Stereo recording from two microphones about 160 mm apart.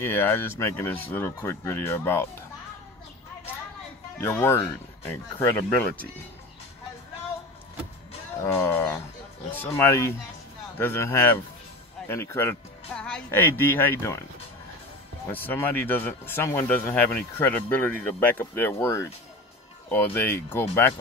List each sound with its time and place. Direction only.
0.0 s speech: 15° left (ahead or behind)
4.2 s speech: 15° left (ahead or behind)
8.5 s speech: 15° left (ahead or behind)
15.3 s speech: 10° left (ahead or behind)